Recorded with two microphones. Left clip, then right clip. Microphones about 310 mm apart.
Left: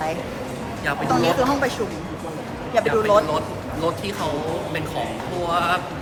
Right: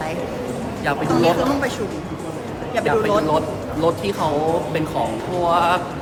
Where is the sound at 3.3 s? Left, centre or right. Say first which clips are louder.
Right 4 dB; centre.